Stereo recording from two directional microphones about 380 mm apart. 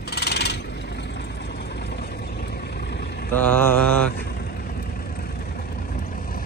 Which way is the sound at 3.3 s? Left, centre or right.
Centre.